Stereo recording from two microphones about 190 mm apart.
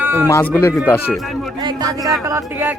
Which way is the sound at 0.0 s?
10° right (ahead or behind).